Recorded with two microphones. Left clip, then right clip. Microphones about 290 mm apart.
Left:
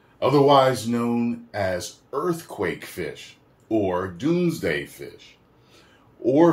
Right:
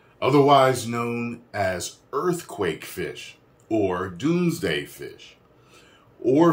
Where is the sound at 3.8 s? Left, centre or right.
Centre.